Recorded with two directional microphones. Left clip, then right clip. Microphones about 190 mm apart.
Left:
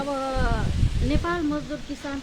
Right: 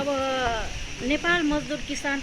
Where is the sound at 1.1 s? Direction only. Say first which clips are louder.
Right 4 dB; 20° left (ahead or behind).